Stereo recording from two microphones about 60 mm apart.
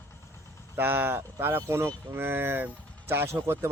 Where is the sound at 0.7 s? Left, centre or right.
Right.